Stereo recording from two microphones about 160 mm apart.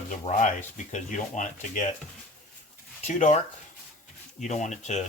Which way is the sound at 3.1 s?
50° left (ahead or behind).